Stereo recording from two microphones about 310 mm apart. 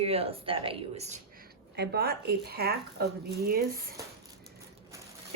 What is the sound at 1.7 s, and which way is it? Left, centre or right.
Speech, right.